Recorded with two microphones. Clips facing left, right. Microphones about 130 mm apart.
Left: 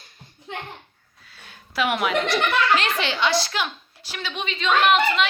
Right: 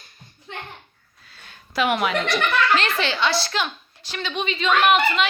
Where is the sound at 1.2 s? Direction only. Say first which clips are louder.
Even; 5° left (ahead or behind).